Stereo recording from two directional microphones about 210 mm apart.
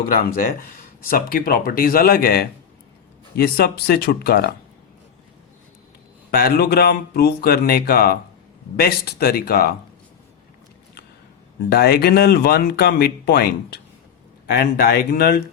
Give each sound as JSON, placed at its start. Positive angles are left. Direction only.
{"t": 0.0, "sound": "speech", "side_deg": 40}
{"t": 6.3, "sound": "speech", "side_deg": 45}
{"t": 11.7, "sound": "speech", "side_deg": 45}